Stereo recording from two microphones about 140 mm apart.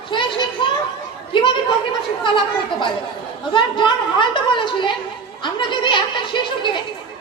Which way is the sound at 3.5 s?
35° left (ahead or behind).